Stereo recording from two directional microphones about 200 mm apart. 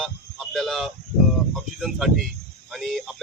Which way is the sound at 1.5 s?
Centre (ahead or behind).